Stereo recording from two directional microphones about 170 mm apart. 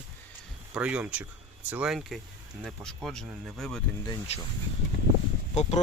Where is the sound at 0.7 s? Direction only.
5° right (ahead or behind).